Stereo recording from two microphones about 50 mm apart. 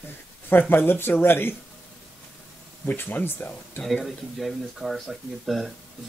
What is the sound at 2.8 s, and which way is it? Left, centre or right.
Speech, left.